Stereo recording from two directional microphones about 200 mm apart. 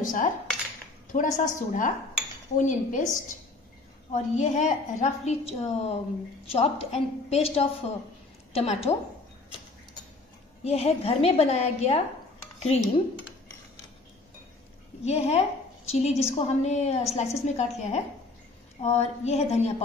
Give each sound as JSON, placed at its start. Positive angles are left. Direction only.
{"t": 0.0, "sound": "dishes", "side_deg": 40}
{"t": 1.1, "sound": "a woman's voice", "side_deg": 40}
{"t": 10.6, "sound": "a woman's voice", "side_deg": 30}
{"t": 12.5, "sound": "dishes", "side_deg": 35}
{"t": 15.0, "sound": "a woman's voice", "side_deg": 30}